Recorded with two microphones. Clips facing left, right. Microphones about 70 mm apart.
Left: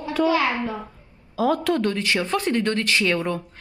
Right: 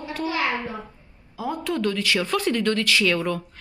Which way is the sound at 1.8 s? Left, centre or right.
Left.